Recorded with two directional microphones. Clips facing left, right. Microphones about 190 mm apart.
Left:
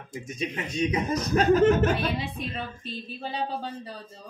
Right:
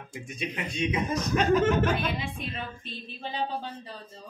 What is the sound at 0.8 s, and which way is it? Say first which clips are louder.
Speech: left 2 dB; 40° left (ahead or behind).